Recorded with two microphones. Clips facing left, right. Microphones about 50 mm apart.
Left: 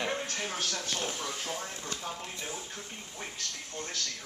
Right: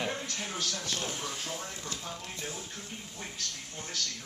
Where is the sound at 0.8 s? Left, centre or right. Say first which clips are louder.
Left 1 dB; centre.